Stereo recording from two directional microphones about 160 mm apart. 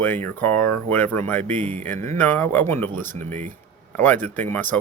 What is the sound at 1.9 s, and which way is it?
Music, 50° right (ahead or behind).